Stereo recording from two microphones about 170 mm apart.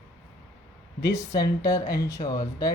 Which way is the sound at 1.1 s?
20° left (ahead or behind).